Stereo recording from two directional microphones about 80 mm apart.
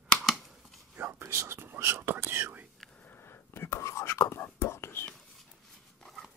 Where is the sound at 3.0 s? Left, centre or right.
Left.